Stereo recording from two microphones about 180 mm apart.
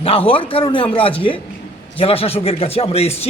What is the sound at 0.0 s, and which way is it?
A man's voice, 30° left (ahead or behind).